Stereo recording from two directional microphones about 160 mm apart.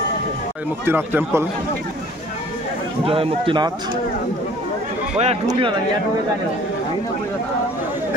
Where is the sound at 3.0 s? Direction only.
35° right (ahead or behind).